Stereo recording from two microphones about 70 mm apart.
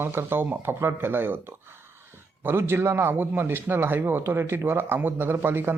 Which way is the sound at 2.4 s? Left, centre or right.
Right.